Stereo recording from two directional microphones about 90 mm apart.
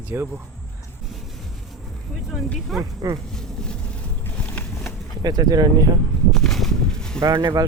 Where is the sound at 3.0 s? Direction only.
45° right (ahead or behind).